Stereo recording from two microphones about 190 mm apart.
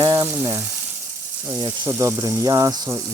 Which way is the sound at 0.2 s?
15° right (ahead or behind).